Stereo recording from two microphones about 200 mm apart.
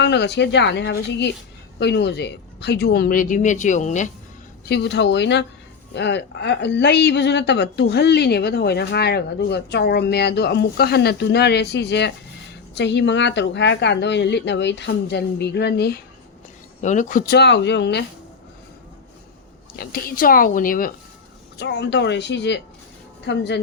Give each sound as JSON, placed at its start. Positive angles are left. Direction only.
{"t": 0.0, "sound": "a woman's voice", "side_deg": 60}
{"t": 4.7, "sound": "a woman's voice", "side_deg": 55}
{"t": 16.8, "sound": "a woman's voice", "side_deg": 40}
{"t": 19.7, "sound": "speech", "side_deg": 45}
{"t": 21.6, "sound": "a woman's voice", "side_deg": 60}